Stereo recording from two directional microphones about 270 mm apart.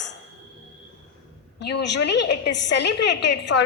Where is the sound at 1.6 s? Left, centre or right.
Left.